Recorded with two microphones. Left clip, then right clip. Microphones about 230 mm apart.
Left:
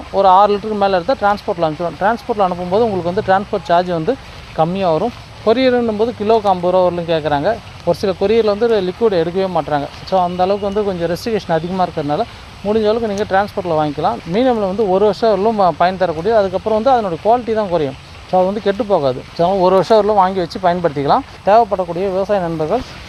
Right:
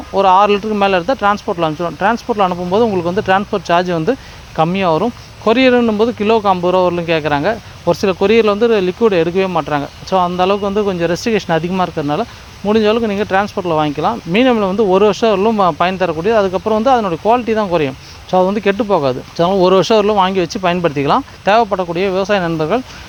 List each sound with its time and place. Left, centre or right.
0.1 s speech: right
20.1 s speech: right
20.4 s speech: right
21.6 s speech: right